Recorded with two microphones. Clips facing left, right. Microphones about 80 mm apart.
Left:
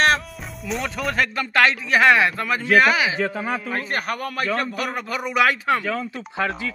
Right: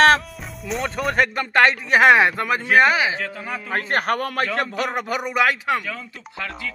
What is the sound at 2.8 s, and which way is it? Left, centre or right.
Speech, right.